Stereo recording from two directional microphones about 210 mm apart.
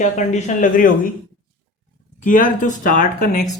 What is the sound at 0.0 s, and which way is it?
Speech, 35° left (ahead or behind).